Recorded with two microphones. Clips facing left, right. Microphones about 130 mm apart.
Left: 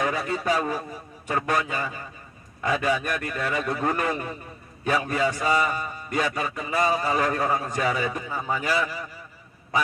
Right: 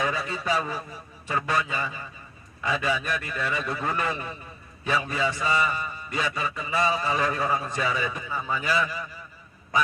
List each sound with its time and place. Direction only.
0.0 s a man's voice: 45° left (ahead or behind)